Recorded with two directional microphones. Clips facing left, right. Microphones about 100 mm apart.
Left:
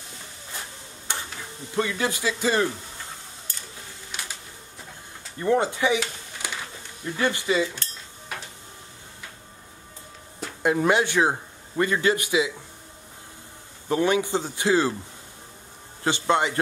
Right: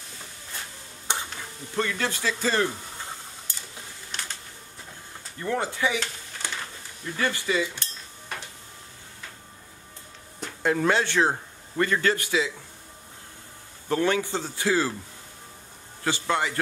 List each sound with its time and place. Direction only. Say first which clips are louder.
1.1 s stir: right 2 dB; 20° right (ahead or behind)
1.8 s a man's voice: left 2 dB; 15° left (ahead or behind)
4.1 s a sound: even; 10° left (ahead or behind)
5.4 s a man's voice: left 5 dB; 20° left (ahead or behind)
5.9 s a sound: left 2 dB; 5° left (ahead or behind)
7.2 s a man's voice: left 3 dB; 20° left (ahead or behind)
10.6 s a man's voice: left 2 dB; 15° left (ahead or behind)
13.8 s a man's voice: left 2 dB; 15° left (ahead or behind)
16.0 s a man's voice: left 4 dB; 20° left (ahead or behind)